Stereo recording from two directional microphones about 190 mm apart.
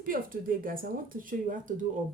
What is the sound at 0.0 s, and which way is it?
A woman's voice, 45° right (ahead or behind).